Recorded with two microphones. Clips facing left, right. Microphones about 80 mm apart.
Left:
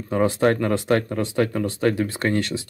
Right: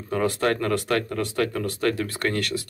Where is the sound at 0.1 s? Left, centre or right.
Centre.